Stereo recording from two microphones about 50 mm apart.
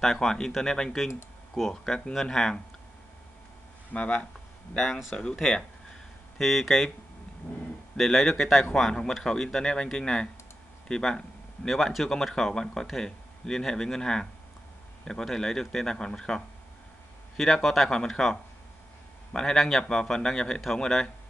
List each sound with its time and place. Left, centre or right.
0.0 s speech: centre
1.5 s speech: centre
3.9 s speech: left
4.7 s speech: centre
8.0 s speech: centre
17.4 s speech: centre
19.3 s speech: centre
19.8 s speech: centre